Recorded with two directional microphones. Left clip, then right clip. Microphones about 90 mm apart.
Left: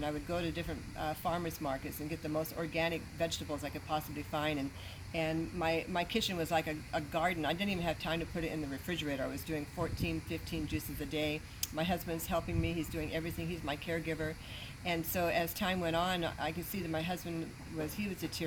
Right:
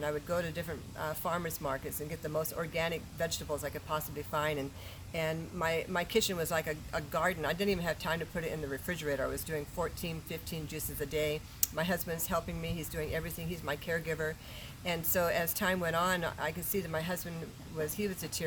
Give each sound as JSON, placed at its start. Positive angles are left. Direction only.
{"t": 0.3, "sound": "a woman's voice", "side_deg": -35}
{"t": 10.8, "sound": "a woman's voice", "side_deg": -35}